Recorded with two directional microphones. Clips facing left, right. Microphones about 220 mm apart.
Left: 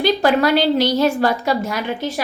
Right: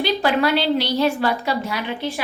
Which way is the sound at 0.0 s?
45° left (ahead or behind).